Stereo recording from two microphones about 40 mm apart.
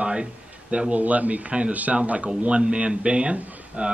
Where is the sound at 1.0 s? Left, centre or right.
Right.